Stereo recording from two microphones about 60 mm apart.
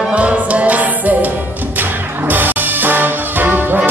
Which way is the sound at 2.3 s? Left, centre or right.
Right.